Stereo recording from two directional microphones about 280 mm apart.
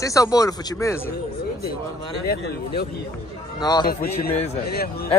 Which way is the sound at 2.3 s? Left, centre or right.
Left.